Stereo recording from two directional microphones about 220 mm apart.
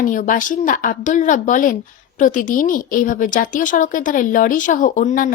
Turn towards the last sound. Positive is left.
turn(degrees=35)  # may be behind; listen again after turning